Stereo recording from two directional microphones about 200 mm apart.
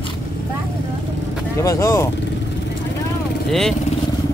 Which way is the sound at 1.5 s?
15° left (ahead or behind).